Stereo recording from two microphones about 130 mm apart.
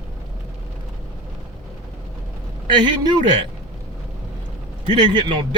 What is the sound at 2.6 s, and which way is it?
Speech, 35° right (ahead or behind).